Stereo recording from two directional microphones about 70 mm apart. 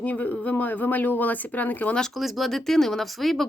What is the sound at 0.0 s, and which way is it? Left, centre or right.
Speech, left.